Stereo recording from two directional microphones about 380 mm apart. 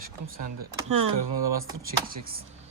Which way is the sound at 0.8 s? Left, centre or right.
Right.